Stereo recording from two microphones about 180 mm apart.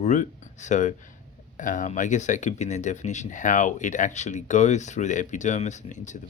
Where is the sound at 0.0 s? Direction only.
40° left (ahead or behind).